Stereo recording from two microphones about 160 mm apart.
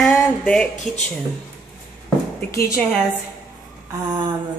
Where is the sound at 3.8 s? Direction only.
30° right (ahead or behind).